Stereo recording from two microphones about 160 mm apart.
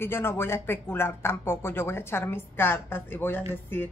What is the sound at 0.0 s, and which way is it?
Speech, 15° left (ahead or behind).